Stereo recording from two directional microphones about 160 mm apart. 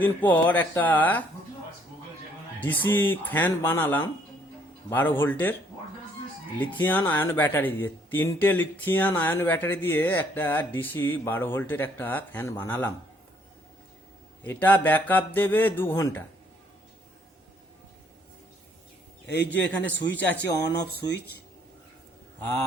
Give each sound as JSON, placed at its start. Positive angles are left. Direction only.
{"t": 0.0, "sound": "speech", "side_deg": 10}
{"t": 2.6, "sound": "speech", "side_deg": 10}
{"t": 6.6, "sound": "speech", "side_deg": 10}
{"t": 14.4, "sound": "speech", "side_deg": 10}
{"t": 19.2, "sound": "a man's voice", "side_deg": 90}
{"t": 19.5, "sound": "speech", "side_deg": 10}
{"t": 21.0, "sound": "speech", "side_deg": 20}